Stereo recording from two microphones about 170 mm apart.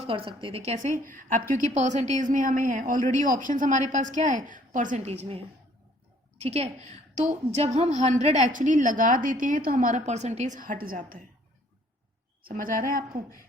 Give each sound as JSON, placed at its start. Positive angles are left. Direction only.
{"t": 0.0, "sound": "a woman's voice", "side_deg": -30}
{"t": 6.4, "sound": "a woman's voice", "side_deg": -40}
{"t": 12.4, "sound": "speech", "side_deg": -55}